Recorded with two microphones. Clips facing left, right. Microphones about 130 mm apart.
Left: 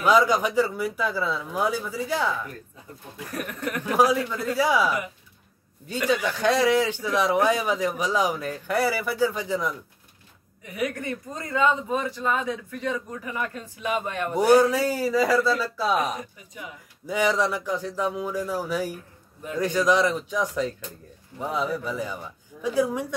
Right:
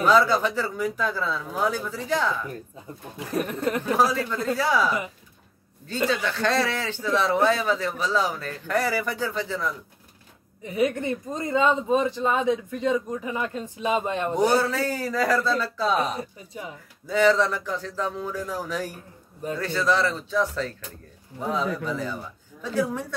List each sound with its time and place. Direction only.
0.0 s speech: 15° left (ahead or behind)
3.2 s speech: 30° right (ahead or behind)
3.9 s speech: 10° left (ahead or behind)
6.0 s speech: 15° left (ahead or behind)
10.6 s speech: 25° right (ahead or behind)
14.3 s speech: 10° left (ahead or behind)
16.0 s speech: 30° right (ahead or behind)
17.0 s speech: 15° left (ahead or behind)